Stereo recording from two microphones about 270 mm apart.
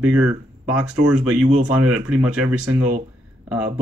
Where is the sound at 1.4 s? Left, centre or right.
Right.